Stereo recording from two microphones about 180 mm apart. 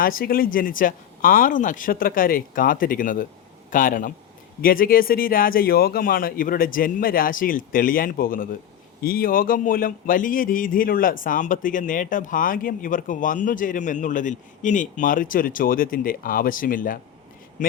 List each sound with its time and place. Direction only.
0.0 s a man's voice: 55° left (ahead or behind)